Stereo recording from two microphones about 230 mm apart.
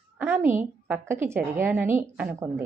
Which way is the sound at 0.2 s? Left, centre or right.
Centre.